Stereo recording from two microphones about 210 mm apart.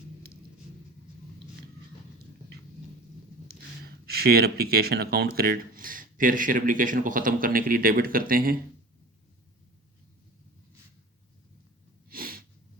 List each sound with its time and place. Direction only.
3.5 s speech: 50° right (ahead or behind)
12.1 s sneeze: 45° right (ahead or behind)